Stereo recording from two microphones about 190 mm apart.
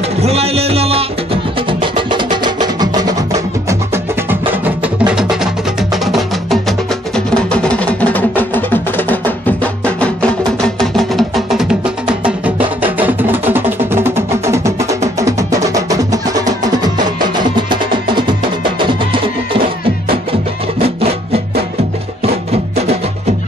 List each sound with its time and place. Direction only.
0.2 s music: 35° right (ahead or behind)
22.2 s music: 30° right (ahead or behind)